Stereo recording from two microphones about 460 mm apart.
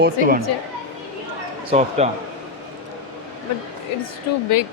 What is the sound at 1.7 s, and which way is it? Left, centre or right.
Speech, centre.